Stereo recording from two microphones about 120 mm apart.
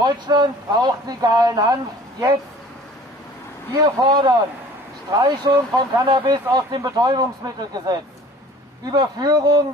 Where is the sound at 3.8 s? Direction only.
35° right (ahead or behind).